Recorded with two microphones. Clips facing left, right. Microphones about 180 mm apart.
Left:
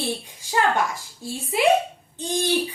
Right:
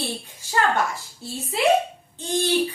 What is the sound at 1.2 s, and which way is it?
A child's voice, 15° left (ahead or behind).